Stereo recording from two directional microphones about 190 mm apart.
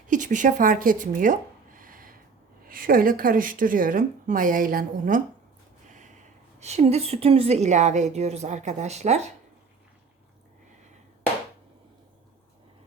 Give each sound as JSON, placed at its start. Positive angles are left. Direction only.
{"t": 0.1, "sound": "a woman's voice", "side_deg": -40}
{"t": 6.6, "sound": "a woman's voice", "side_deg": -35}